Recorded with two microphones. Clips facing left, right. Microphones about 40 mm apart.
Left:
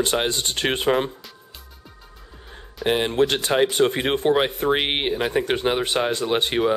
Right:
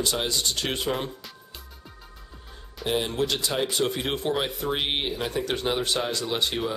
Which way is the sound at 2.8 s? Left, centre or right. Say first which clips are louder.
Left 6 dB; left.